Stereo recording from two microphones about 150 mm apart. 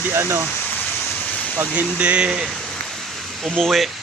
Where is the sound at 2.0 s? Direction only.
5° right (ahead or behind).